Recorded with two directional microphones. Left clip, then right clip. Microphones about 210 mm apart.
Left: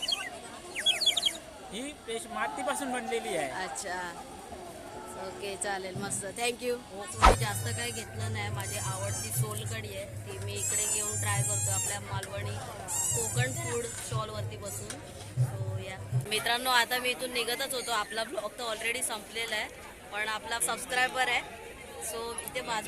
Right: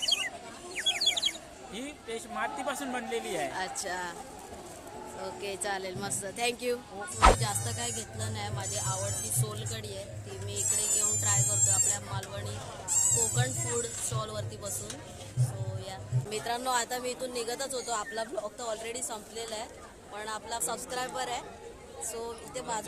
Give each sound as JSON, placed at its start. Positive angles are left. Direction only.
{"t": 0.0, "sound": "a sound", "side_deg": -50}
{"t": 0.8, "sound": "speech", "side_deg": 0}
{"t": 5.2, "sound": "speech", "side_deg": -10}
{"t": 14.2, "sound": "speech", "side_deg": -10}
{"t": 15.9, "sound": "speech", "side_deg": -15}